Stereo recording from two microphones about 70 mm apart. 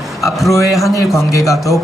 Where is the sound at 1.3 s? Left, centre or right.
Left.